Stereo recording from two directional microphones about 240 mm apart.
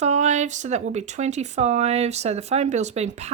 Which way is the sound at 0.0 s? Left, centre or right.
Right.